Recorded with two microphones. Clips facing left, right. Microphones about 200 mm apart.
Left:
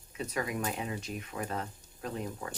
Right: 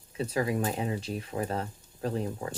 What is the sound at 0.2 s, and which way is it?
Speech, 30° right (ahead or behind).